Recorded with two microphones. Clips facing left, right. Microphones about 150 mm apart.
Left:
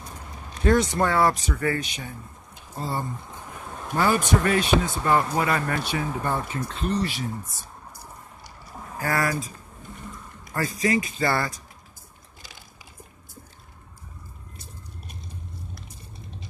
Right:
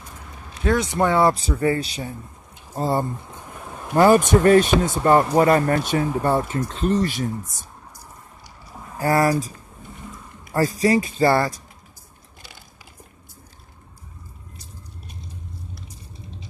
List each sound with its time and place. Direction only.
0.9 s speech: 20° right (ahead or behind); by 7.2 s 45° right (ahead or behind)
9.0 s speech: 30° right (ahead or behind)
10.5 s speech: 35° right (ahead or behind)